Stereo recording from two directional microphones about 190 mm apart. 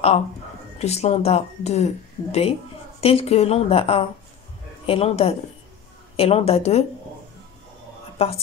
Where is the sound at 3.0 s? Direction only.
30° left (ahead or behind).